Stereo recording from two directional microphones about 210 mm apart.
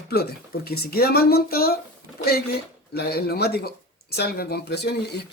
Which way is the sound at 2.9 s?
50° left (ahead or behind).